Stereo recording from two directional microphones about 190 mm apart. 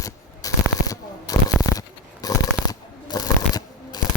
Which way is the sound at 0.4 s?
20° left (ahead or behind).